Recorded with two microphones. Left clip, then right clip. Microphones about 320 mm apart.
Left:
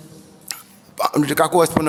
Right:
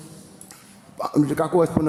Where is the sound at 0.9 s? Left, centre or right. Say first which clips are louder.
Left 4 dB; left.